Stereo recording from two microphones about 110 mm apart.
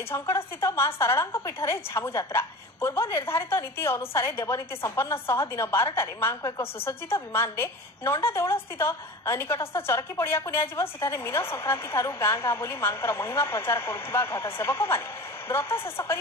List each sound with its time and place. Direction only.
0.1 s a woman's voice: 25° left (ahead or behind)